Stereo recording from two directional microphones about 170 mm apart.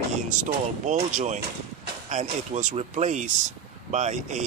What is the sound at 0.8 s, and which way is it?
Speech, 45° right (ahead or behind).